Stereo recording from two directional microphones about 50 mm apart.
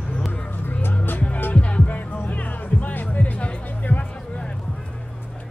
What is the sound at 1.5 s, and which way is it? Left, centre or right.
Music, left.